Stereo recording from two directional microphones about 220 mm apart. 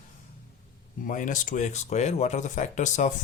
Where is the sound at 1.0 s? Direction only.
35° left (ahead or behind).